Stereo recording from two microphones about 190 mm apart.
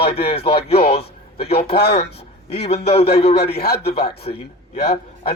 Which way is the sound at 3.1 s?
35° left (ahead or behind).